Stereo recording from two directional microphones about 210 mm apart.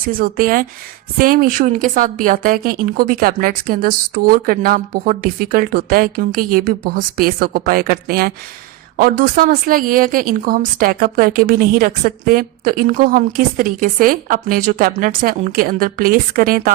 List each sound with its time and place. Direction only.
0.1 s a woman's voice: 45° right (ahead or behind)